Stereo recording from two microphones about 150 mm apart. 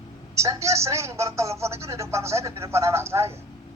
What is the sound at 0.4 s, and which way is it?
A woman's voice, 20° right (ahead or behind).